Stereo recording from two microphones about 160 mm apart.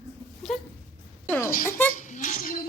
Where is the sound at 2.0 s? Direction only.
50° left (ahead or behind).